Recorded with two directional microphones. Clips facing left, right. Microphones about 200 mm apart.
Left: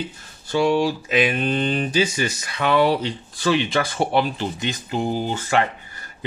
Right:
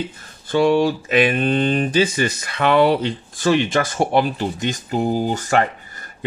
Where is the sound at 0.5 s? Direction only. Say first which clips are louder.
Right 3 dB; 55° right (ahead or behind).